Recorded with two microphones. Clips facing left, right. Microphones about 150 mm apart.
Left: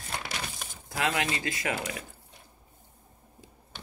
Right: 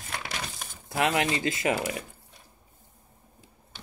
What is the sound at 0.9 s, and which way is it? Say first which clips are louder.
Speech: right 4 dB; 25° right (ahead or behind).